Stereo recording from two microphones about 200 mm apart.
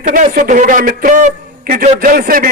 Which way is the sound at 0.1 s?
45° right (ahead or behind).